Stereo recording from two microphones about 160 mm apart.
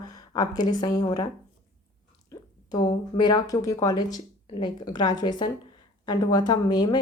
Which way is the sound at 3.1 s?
25° left (ahead or behind).